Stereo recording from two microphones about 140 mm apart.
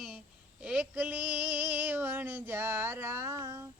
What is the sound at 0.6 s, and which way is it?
Female singing, 10° right (ahead or behind).